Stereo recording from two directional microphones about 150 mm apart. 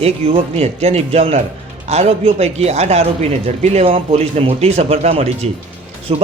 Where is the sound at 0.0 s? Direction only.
45° right (ahead or behind).